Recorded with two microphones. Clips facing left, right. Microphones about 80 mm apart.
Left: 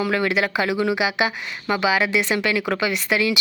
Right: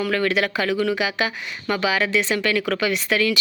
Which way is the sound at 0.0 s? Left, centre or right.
Centre.